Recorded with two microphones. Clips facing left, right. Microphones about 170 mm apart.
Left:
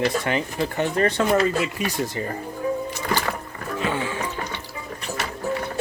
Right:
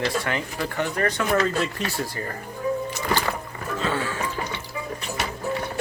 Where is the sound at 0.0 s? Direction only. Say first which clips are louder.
Left 3 dB; 20° left (ahead or behind).